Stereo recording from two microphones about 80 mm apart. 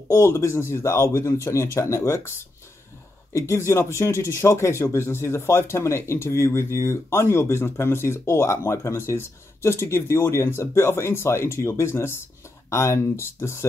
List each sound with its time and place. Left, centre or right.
0.1 s speech: left
3.3 s speech: left